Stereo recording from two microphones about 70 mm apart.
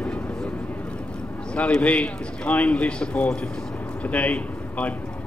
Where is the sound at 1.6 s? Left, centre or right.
Centre.